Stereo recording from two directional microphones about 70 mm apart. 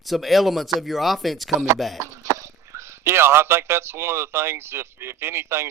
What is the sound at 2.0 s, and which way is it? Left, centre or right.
Speech, right.